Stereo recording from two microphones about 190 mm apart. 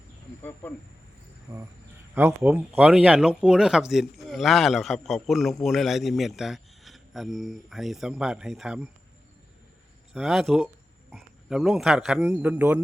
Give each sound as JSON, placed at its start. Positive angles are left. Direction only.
{"t": 1.5, "sound": "cricket", "side_deg": -20}
{"t": 2.1, "sound": "speech", "side_deg": -10}
{"t": 10.1, "sound": "speech", "side_deg": 0}